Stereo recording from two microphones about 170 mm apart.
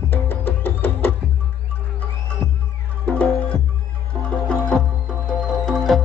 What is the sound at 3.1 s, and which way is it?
Music, 10° left (ahead or behind).